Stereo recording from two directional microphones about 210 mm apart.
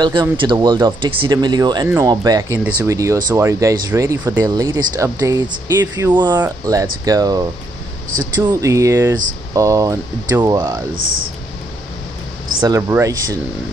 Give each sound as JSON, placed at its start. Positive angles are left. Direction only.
{"t": 0.0, "sound": "speech", "side_deg": -20}
{"t": 12.6, "sound": "speech", "side_deg": -15}